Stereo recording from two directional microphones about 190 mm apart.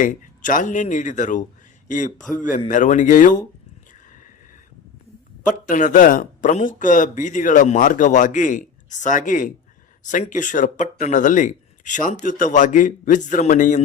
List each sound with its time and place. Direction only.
0.0 s speech: 45° left (ahead or behind)
5.5 s speech: 40° left (ahead or behind)